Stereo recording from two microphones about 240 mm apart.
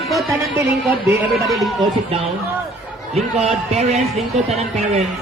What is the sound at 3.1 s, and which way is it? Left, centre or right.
A man's voice, right.